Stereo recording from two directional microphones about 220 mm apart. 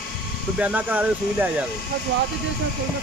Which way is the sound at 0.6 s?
5° right (ahead or behind).